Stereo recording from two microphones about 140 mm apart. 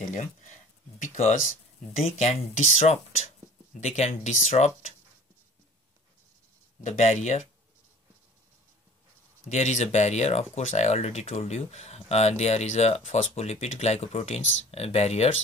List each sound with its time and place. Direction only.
0.9 s speech: 60° left (ahead or behind)
2.0 s speech: 50° left (ahead or behind)
6.8 s speech: 55° left (ahead or behind)
9.5 s speech: 55° left (ahead or behind)